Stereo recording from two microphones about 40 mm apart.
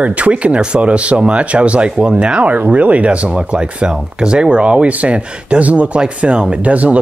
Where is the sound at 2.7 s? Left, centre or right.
Right.